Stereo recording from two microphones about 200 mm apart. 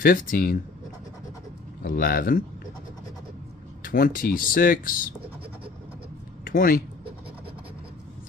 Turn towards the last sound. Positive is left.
turn(degrees=45)  # may be behind; listen again after turning